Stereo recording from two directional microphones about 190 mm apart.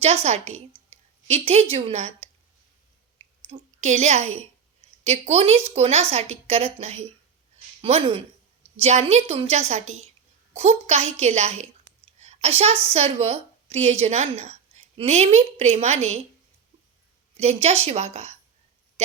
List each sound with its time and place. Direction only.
0.0 s speech: 35° right (ahead or behind)
0.9 s a sound: 35° right (ahead or behind)
1.7 s speech: 35° right (ahead or behind)
3.4 s a woman's voice: 35° right (ahead or behind)
17.3 s speech: 35° right (ahead or behind)